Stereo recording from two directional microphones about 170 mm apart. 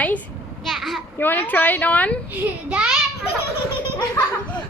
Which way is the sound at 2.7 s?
5° right (ahead or behind).